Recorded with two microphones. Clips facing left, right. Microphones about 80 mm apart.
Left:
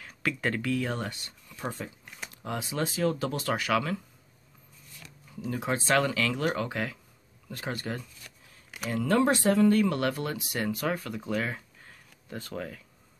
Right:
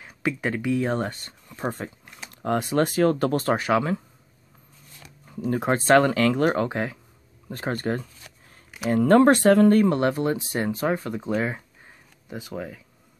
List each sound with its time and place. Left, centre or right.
0.0 s speech: centre
0.7 s speech: right
3.5 s speech: right
5.2 s speech: right
7.5 s speech: right
9.8 s speech: right; by 12.8 s centre